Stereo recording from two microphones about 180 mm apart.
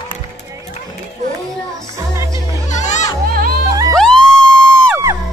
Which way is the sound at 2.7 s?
40° left (ahead or behind).